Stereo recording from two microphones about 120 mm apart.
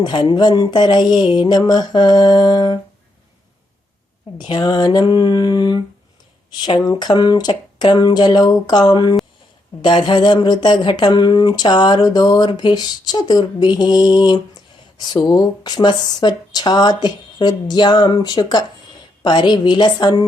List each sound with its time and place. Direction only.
0.0 s speech: 35° left (ahead or behind)
4.4 s speech: 35° left (ahead or behind)